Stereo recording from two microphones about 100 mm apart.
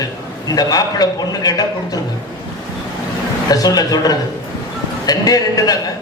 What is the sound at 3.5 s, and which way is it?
A man's voice, 40° left (ahead or behind).